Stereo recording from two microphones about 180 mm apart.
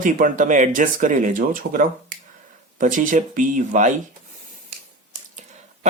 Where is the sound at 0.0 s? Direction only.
50° right (ahead or behind).